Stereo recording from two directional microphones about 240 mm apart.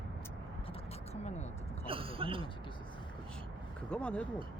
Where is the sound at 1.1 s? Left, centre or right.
Left.